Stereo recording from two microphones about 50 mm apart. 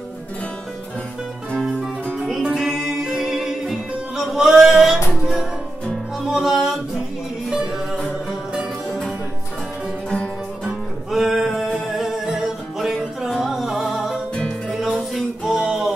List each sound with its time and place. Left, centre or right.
2.5 s music: centre
10.0 s music: centre
10.7 s music: centre
15.4 s music: centre